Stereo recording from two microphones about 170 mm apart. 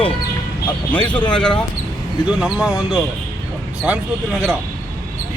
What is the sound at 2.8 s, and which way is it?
Speech, 25° left (ahead or behind).